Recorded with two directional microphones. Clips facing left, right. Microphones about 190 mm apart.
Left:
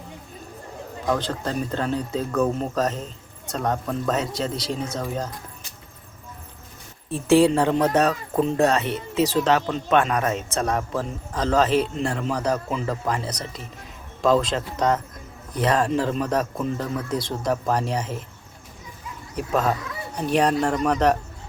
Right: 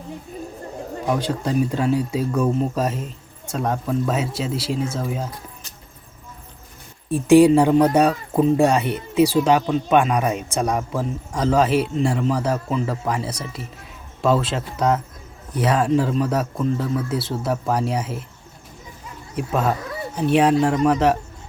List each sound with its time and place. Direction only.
1.0 s speech: 10° right (ahead or behind)
7.1 s speech: 15° right (ahead or behind)
19.4 s speech: 5° right (ahead or behind)